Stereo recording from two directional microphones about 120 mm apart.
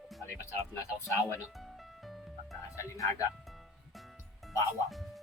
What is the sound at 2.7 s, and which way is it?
Speech, 25° left (ahead or behind).